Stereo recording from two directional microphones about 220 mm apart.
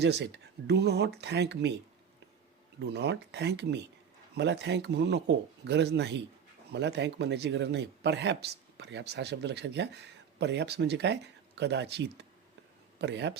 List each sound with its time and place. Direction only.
0.0 s speech: 50° right (ahead or behind)
2.8 s speech: 50° right (ahead or behind)